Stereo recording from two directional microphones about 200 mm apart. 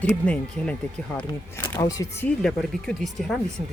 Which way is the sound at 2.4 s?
Centre (ahead or behind).